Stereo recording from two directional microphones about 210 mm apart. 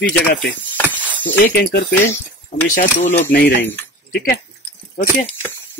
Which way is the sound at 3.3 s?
45° left (ahead or behind).